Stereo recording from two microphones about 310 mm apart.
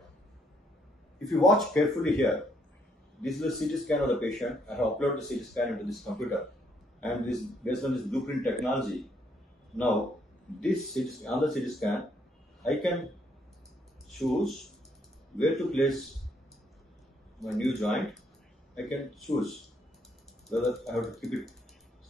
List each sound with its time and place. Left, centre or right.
1.2 s speech: centre
10.6 s speech: centre
14.1 s speech: centre
17.4 s speech: centre